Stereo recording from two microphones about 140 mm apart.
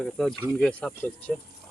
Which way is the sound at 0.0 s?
Centre (ahead or behind).